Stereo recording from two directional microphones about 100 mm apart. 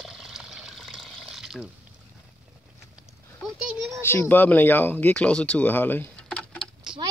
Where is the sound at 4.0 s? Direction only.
25° left (ahead or behind).